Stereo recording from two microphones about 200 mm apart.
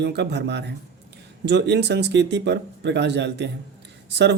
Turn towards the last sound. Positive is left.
turn(degrees=-60)  # may be behind; listen again after turning